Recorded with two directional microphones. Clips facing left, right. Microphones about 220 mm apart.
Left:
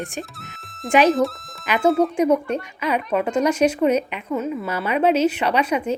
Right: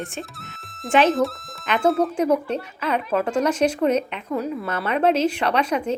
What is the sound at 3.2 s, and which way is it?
Speech, 10° left (ahead or behind).